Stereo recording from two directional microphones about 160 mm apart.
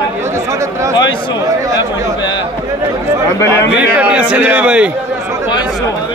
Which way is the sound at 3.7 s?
10° right (ahead or behind).